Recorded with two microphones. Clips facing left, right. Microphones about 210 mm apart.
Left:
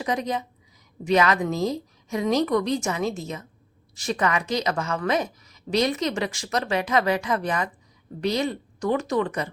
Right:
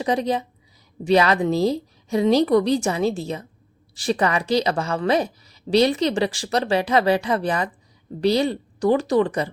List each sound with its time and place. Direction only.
0.0 s a woman's voice: 30° right (ahead or behind)